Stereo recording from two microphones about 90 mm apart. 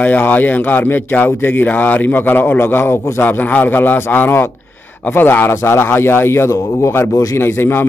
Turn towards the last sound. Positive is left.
turn(degrees=25)  # may be behind; listen again after turning